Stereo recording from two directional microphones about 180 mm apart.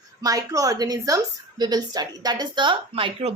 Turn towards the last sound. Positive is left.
turn(degrees=-30)  # may be behind; listen again after turning